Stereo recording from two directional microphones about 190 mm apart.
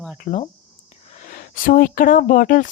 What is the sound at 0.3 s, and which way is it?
Speech, 40° left (ahead or behind).